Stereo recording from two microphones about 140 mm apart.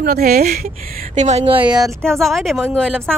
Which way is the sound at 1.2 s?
45° right (ahead or behind).